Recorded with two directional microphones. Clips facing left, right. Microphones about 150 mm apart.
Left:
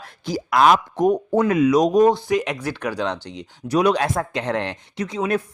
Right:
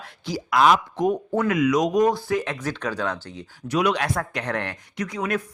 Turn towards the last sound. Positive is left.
turn(degrees=25)  # may be behind; listen again after turning